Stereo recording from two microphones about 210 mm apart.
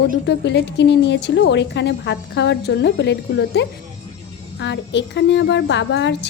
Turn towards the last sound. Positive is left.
turn(degrees=60)  # may be behind; listen again after turning